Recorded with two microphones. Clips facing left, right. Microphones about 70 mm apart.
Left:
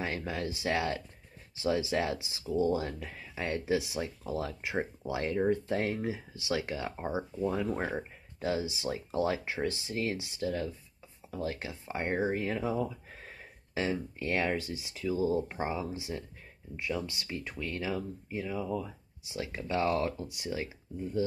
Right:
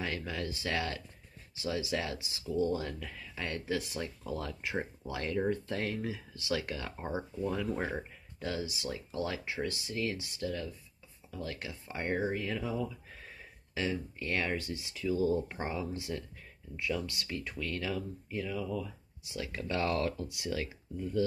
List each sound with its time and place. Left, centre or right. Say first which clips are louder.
0.0 s speech: left 2 dB; left